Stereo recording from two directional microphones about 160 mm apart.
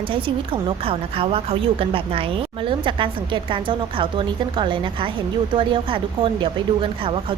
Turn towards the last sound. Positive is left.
turn(degrees=-35)  # may be behind; listen again after turning